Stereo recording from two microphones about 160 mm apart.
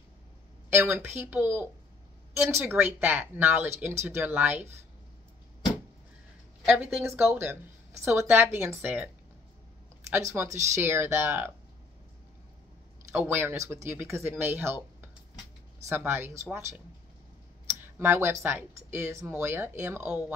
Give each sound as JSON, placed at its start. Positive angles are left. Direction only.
{"t": 0.7, "sound": "speech", "side_deg": -15}
{"t": 6.6, "sound": "speech", "side_deg": -10}
{"t": 13.1, "sound": "speech", "side_deg": -15}